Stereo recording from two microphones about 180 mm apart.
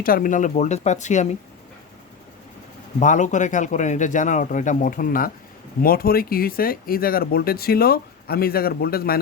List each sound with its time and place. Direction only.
0.0 s speech: 50° left (ahead or behind)
3.0 s speech: 45° left (ahead or behind); by 9.1 s 60° left (ahead or behind)